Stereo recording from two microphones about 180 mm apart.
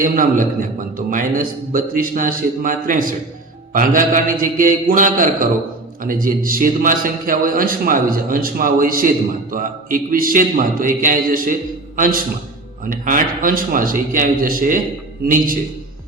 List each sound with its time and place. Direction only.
0.0 s a man's voice: 50° right (ahead or behind)